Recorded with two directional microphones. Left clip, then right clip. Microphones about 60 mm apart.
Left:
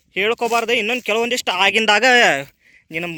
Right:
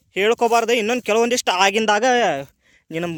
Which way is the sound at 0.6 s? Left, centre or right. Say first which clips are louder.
Even; right.